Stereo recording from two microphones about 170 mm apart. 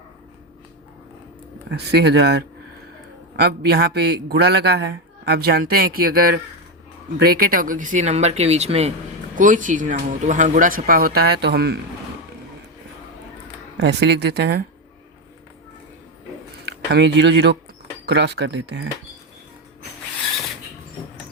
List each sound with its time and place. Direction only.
1.7 s a man's voice: 75° right (ahead or behind); by 8.9 s 40° right (ahead or behind)
9.4 s speech: 50° right (ahead or behind); by 11.8 s 75° right (ahead or behind)
13.7 s speech: 85° right
16.9 s speech: 90° right